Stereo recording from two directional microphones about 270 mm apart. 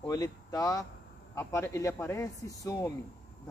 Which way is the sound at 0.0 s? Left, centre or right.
Centre.